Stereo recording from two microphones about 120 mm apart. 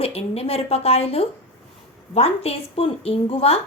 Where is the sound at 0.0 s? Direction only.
55° left (ahead or behind).